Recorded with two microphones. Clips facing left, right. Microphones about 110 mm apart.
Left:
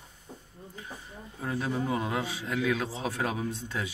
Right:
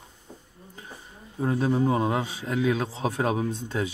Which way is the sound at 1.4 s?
30° right (ahead or behind).